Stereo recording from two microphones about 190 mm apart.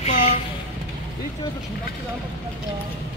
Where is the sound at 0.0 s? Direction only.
35° left (ahead or behind).